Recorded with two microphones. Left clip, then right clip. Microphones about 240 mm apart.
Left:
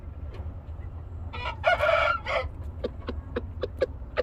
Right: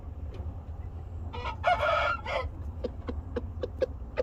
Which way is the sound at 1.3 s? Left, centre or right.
Centre.